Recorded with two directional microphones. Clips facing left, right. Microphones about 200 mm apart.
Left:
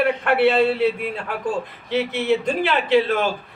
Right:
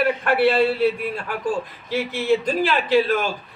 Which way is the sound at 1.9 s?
20° left (ahead or behind).